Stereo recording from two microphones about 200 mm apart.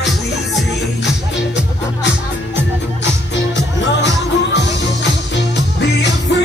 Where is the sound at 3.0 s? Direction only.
60° left (ahead or behind).